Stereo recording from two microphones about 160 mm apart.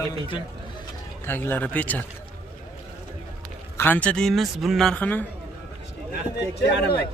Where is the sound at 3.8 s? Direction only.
10° left (ahead or behind).